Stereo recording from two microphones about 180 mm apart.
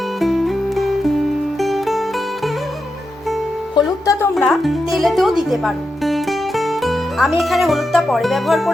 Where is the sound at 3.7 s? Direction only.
20° left (ahead or behind).